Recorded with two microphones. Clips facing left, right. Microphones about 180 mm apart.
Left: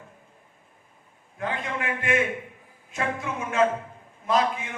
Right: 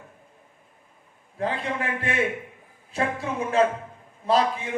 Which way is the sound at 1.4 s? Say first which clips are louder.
Right 3 dB; 35° right (ahead or behind).